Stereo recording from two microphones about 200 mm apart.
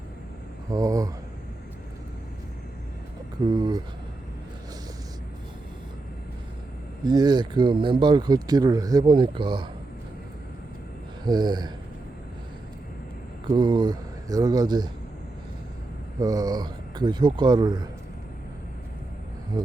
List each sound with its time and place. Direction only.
0.7 s speech: 15° right (ahead or behind)
3.4 s speech: 20° right (ahead or behind)
7.0 s speech: 20° right (ahead or behind)
11.3 s speech: 20° right (ahead or behind)
13.5 s speech: 25° right (ahead or behind)
16.2 s speech: 20° right (ahead or behind)
19.5 s speech: 20° right (ahead or behind)